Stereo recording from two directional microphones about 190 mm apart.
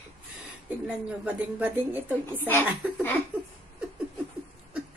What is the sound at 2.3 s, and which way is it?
Speech, 10° left (ahead or behind).